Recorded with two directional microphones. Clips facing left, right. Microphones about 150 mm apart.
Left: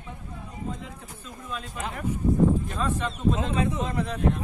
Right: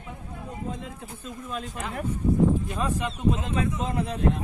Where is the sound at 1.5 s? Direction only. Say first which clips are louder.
Even; 45° right (ahead or behind).